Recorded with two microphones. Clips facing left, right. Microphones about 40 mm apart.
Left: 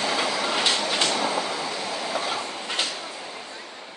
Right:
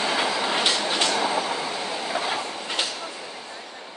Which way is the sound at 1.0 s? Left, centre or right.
Right.